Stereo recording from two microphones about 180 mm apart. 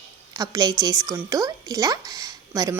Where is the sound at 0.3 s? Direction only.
20° right (ahead or behind).